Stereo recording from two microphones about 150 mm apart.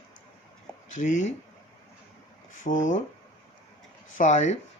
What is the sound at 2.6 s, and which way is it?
Speech, 55° left (ahead or behind).